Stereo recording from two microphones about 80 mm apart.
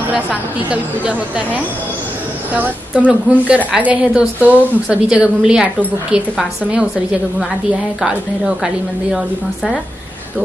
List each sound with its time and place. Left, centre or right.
0.1 s a woman's voice: centre